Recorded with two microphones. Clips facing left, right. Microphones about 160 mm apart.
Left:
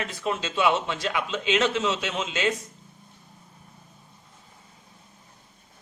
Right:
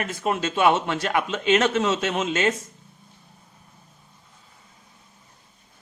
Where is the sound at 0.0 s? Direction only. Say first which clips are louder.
Right 4 dB; 55° right (ahead or behind).